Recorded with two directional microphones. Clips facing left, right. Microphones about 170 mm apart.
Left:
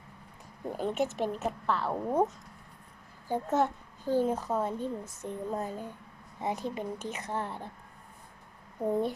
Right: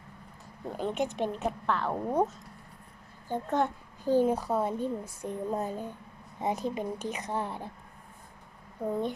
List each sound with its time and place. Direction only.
0.8 s a woman's voice: 5° left (ahead or behind)
3.2 s a woman's voice: 5° left (ahead or behind)
4.0 s a child's voice: 15° right (ahead or behind)